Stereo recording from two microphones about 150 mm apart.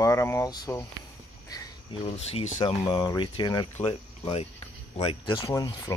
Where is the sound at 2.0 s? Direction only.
45° left (ahead or behind).